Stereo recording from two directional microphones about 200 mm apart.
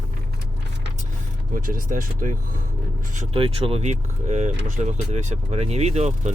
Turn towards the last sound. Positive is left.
turn(degrees=-35)  # may be behind; listen again after turning